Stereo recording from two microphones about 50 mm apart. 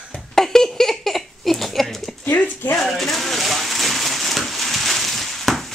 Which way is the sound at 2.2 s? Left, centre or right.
Left.